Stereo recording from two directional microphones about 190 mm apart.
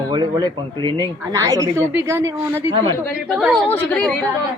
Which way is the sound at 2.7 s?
25° right (ahead or behind).